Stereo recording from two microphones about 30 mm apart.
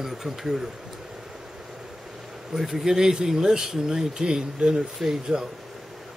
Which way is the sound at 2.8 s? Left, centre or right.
Centre.